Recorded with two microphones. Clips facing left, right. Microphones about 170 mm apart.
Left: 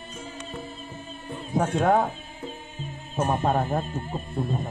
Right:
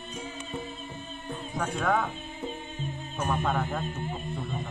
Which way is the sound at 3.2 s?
35° left (ahead or behind).